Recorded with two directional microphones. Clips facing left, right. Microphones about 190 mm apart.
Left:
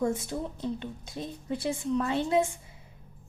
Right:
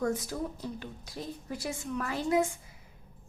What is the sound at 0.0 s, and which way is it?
A woman's voice, 25° left (ahead or behind).